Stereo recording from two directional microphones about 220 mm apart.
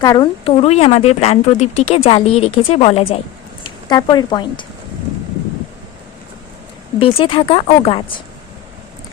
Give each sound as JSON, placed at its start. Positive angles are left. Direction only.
{"t": 0.0, "sound": "speech", "side_deg": 20}
{"t": 7.0, "sound": "speech", "side_deg": 25}